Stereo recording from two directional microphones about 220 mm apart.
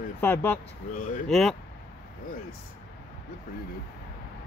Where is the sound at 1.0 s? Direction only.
40° left (ahead or behind).